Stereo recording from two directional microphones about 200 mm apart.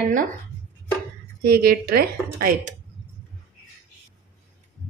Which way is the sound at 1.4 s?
50° right (ahead or behind).